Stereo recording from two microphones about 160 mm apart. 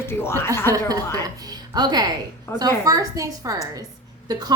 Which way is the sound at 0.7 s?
25° right (ahead or behind).